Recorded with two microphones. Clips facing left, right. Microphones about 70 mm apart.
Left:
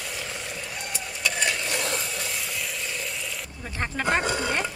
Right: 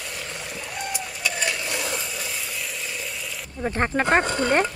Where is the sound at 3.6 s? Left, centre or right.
Right.